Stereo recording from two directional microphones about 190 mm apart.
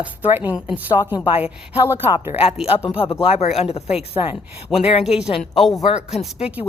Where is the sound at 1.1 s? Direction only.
25° left (ahead or behind).